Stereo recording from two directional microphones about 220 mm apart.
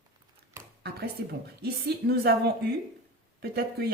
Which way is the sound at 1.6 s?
45° right (ahead or behind).